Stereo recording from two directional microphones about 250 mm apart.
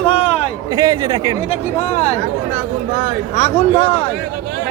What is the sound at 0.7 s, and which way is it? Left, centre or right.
Speech, centre.